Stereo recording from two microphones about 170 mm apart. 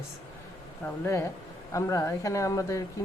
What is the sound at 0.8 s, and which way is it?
Speech, 15° left (ahead or behind).